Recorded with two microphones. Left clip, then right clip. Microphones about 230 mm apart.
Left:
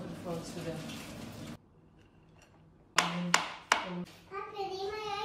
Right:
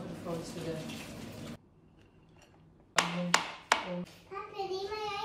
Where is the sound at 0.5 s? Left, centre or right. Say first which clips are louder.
Right 1 dB; centre.